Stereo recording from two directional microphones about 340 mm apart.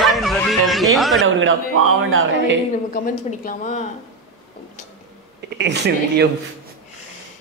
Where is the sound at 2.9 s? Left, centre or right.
Left.